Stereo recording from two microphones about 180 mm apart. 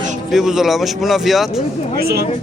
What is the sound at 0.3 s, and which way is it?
Speech, centre (ahead or behind).